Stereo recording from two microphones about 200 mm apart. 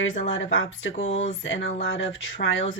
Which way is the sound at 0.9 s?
35° left (ahead or behind).